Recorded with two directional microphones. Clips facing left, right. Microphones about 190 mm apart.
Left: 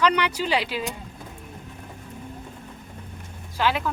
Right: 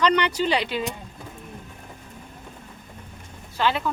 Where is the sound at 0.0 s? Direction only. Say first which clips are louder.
Right 1 dB; 10° left (ahead or behind).